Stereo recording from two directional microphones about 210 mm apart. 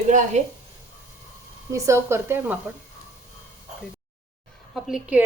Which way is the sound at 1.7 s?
15° right (ahead or behind).